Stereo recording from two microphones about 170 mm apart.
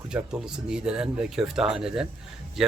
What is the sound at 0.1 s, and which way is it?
Speech, 5° right (ahead or behind).